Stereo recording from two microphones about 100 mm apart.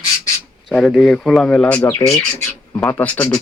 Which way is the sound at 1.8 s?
30° left (ahead or behind).